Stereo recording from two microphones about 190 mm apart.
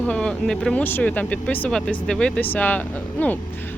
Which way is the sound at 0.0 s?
5° left (ahead or behind).